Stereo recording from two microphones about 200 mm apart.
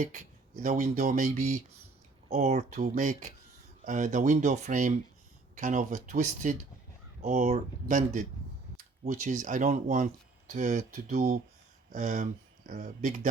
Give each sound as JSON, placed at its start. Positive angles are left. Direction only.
{"t": 0.6, "sound": "speech", "side_deg": -35}